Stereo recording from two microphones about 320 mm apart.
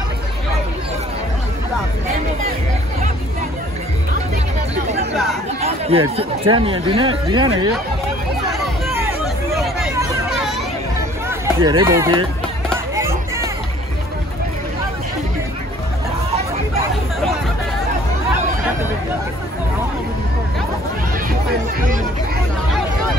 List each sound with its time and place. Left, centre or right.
5.1 s chatter: centre
5.6 s speech: centre
8.8 s hubbub: centre
11.2 s run: centre
12.6 s music: centre